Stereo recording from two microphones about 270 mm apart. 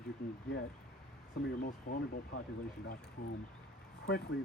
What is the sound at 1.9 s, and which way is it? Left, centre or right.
Speech, left.